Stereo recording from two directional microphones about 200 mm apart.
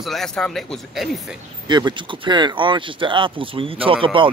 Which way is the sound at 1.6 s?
20° right (ahead or behind).